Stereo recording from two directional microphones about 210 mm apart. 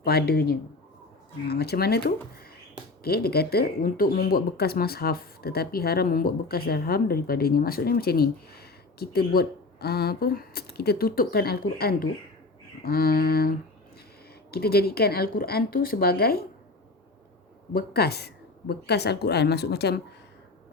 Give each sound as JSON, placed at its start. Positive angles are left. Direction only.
{"t": 0.0, "sound": "speech", "side_deg": 50}
{"t": 14.5, "sound": "speech", "side_deg": 50}
{"t": 17.7, "sound": "speech", "side_deg": 50}